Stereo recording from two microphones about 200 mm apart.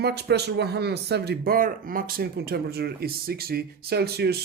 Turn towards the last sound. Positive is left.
turn(degrees=-50)  # may be behind; listen again after turning